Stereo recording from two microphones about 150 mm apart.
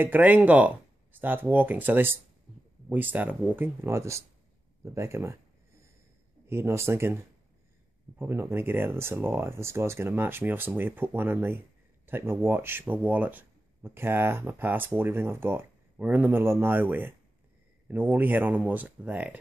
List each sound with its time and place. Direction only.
0.0 s speech: 10° right (ahead or behind)
6.4 s speech: 15° right (ahead or behind)
8.2 s speech: 15° right (ahead or behind)